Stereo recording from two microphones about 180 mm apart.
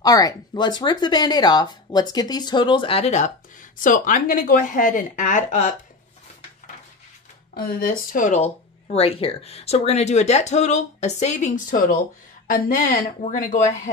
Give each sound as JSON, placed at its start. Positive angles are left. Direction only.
{"t": 0.0, "sound": "speech", "side_deg": 20}
{"t": 3.7, "sound": "speech", "side_deg": 45}
{"t": 7.5, "sound": "speech", "side_deg": 55}
{"t": 8.9, "sound": "speech", "side_deg": 30}